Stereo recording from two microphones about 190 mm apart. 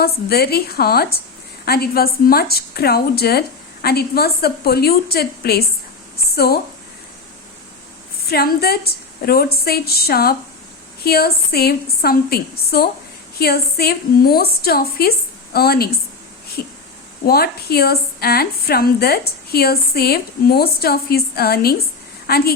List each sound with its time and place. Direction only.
0.0 s a woman's voice: 55° left (ahead or behind)
8.3 s a woman's voice: 55° left (ahead or behind)
17.2 s a woman's voice: 55° left (ahead or behind)